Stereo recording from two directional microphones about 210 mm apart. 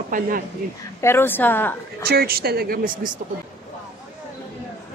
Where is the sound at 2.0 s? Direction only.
45° right (ahead or behind).